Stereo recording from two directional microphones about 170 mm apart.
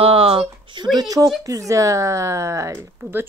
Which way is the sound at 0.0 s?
35° right (ahead or behind).